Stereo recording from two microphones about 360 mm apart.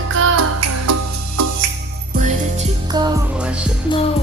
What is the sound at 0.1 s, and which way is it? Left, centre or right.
Music, right.